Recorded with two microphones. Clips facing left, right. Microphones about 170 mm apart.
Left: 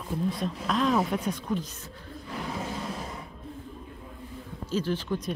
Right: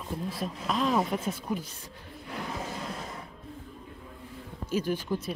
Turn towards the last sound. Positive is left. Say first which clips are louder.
# even
turn(degrees=-10)  # may be behind; listen again after turning